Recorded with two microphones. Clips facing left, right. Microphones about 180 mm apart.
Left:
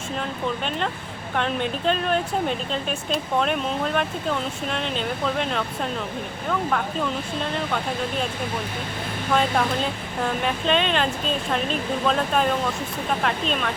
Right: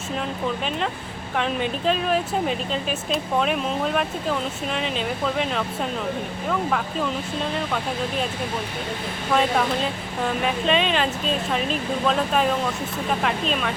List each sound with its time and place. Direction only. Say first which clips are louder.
1.4 s speech: even; centre (ahead or behind)
9.3 s speech: right 1 dB; centre (ahead or behind)